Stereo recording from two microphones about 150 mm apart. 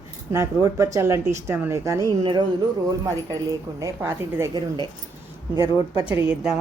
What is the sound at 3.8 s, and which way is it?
Speech, 20° right (ahead or behind).